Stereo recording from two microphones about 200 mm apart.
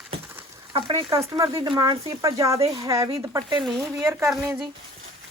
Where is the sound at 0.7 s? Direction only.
25° right (ahead or behind).